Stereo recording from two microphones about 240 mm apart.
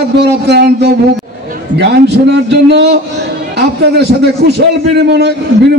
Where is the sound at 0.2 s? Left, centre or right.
Right.